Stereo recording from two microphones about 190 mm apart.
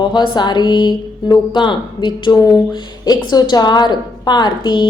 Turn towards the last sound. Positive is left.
turn(degrees=25)  # may be behind; listen again after turning